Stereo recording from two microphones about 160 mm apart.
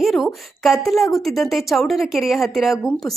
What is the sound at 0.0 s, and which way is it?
Speech, centre (ahead or behind).